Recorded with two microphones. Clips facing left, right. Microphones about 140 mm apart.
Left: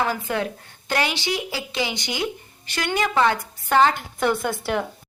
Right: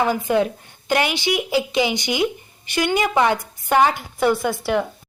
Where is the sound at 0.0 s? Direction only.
15° right (ahead or behind).